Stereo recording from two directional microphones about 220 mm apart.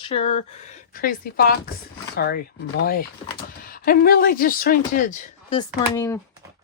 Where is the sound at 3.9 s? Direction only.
40° left (ahead or behind).